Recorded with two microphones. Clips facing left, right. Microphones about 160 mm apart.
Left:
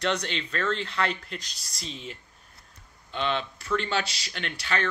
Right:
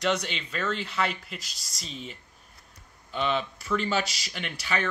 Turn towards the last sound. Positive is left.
turn(degrees=-5)  # may be behind; listen again after turning